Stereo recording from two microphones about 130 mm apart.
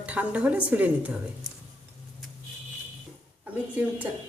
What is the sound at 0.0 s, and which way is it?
A woman's voice, 10° right (ahead or behind).